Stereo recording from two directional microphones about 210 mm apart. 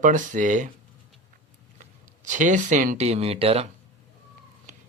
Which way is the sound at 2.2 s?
35° right (ahead or behind).